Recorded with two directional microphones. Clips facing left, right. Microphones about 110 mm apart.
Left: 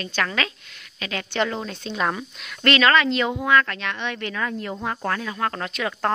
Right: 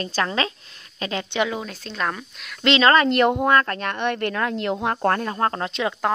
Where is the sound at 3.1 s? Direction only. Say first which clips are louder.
Right 3 dB; 55° right (ahead or behind).